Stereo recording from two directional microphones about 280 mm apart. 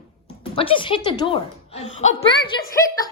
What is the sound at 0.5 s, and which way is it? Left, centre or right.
A woman's voice, centre.